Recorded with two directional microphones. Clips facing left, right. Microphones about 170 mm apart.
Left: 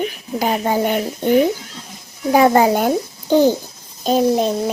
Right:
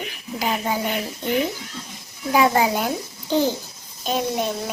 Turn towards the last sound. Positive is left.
turn(degrees=35)  # may be behind; listen again after turning